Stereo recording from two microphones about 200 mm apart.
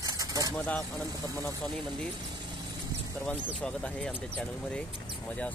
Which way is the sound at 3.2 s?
5° left (ahead or behind).